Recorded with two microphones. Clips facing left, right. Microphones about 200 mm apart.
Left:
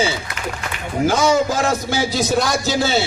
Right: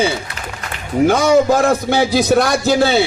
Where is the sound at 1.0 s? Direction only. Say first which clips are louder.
Right 4 dB; 60° right (ahead or behind).